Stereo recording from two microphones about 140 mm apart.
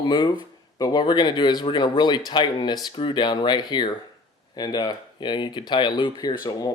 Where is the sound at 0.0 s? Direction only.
30° left (ahead or behind).